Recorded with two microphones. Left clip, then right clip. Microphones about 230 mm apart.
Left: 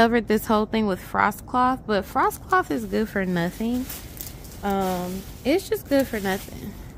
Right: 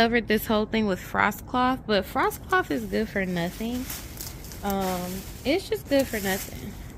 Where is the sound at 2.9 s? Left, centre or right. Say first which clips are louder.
Left 2 dB; centre.